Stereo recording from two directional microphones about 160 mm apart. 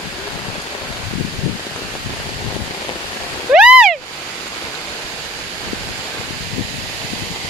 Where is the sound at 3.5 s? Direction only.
5° right (ahead or behind).